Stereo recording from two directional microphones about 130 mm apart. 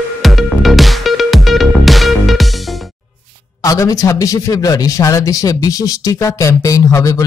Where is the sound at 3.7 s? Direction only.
25° left (ahead or behind).